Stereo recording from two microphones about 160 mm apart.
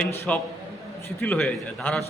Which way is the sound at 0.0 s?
10° left (ahead or behind).